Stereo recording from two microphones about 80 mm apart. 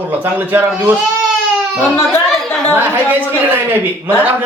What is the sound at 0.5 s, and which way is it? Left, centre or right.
Speech, right.